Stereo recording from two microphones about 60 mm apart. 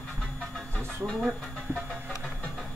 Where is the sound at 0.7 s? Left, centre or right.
Right.